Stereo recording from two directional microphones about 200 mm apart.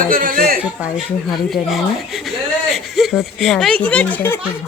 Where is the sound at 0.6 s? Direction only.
Centre (ahead or behind).